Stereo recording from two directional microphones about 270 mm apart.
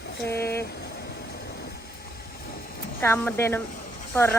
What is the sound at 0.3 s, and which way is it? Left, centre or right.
Speech, centre.